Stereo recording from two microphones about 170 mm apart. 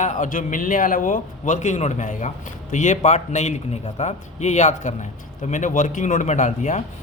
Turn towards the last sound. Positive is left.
turn(degrees=45)  # may be behind; listen again after turning